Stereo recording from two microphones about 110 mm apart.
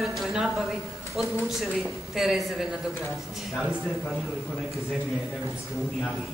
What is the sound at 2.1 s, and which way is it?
Speech, 5° right (ahead or behind).